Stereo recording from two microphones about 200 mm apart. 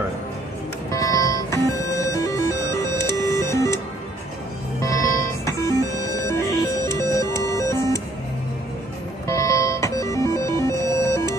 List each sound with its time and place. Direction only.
0.9 s music: 15° left (ahead or behind)
4.8 s music: 15° left (ahead or behind)
9.3 s music: 15° left (ahead or behind)